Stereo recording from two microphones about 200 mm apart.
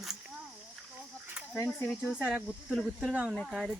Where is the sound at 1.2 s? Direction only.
10° right (ahead or behind).